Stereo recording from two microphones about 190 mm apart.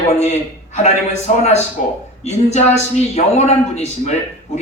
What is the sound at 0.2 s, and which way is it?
A man's voice, 35° left (ahead or behind).